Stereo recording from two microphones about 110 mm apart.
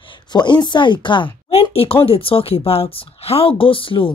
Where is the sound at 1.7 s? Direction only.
60° left (ahead or behind).